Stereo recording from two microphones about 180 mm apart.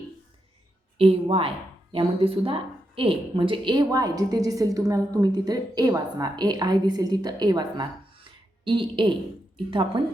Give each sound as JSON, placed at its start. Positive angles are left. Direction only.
{"t": 0.9, "sound": "speech", "side_deg": -35}